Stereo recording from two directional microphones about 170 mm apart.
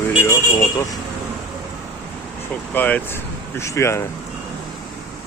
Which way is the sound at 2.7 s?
10° left (ahead or behind).